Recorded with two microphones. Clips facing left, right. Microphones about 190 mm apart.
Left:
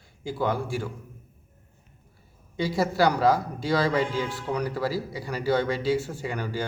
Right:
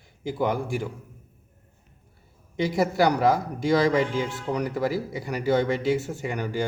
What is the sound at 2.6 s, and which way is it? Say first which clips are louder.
Speech: right 1 dB; 20° right (ahead or behind).